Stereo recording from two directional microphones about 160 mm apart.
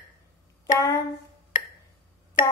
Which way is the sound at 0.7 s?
20° left (ahead or behind).